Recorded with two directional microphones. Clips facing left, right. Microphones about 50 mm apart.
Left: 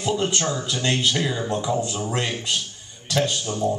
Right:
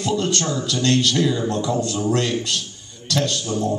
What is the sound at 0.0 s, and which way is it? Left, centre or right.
A man's voice, centre.